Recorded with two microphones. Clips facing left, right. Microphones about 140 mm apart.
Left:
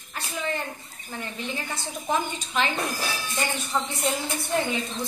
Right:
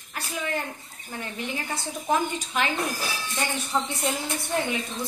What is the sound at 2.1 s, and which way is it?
Speech, 5° right (ahead or behind).